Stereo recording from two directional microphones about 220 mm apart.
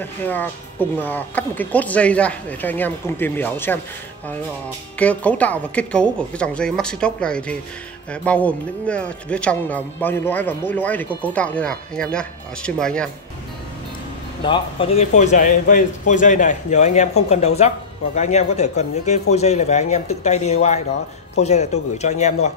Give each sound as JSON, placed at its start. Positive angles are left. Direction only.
{"t": 0.0, "sound": "speech", "side_deg": 10}
{"t": 4.9, "sound": "a woman's voice", "side_deg": 5}
{"t": 14.4, "sound": "a man's voice", "side_deg": 25}